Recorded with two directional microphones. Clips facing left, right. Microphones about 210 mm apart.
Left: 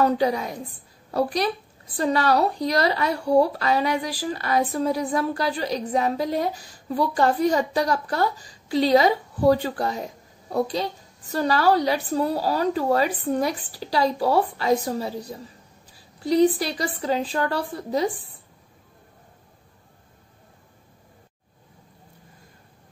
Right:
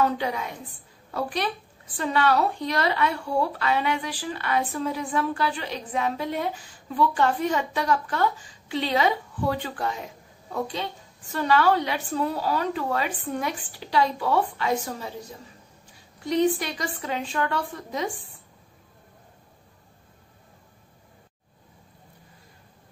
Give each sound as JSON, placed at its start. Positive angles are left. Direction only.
{"t": 0.0, "sound": "speech", "side_deg": 35}